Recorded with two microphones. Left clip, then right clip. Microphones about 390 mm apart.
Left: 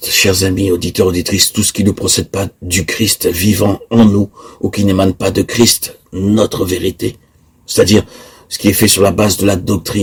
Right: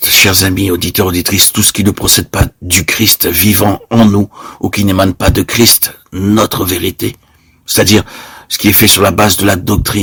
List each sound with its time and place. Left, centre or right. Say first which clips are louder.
0.0 s speech: right 4 dB; right